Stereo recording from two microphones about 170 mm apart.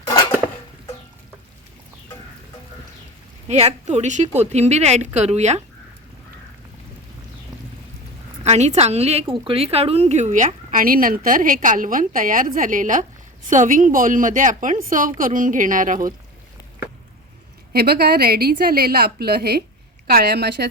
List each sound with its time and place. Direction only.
3.4 s a woman's voice: 40° right (ahead or behind)
8.4 s a woman's voice: 40° right (ahead or behind)
17.7 s a woman's voice: 65° right (ahead or behind)